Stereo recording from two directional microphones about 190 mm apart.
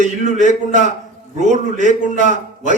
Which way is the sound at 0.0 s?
40° right (ahead or behind).